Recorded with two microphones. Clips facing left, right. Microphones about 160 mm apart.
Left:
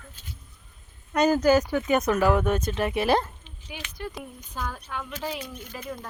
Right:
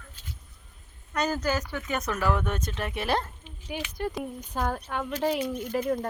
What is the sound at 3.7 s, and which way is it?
Speech, 40° right (ahead or behind).